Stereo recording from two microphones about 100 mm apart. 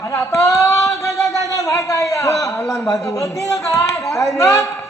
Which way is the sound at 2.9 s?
35° left (ahead or behind).